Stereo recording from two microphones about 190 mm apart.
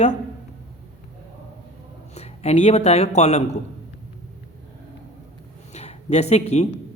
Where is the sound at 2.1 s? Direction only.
35° left (ahead or behind).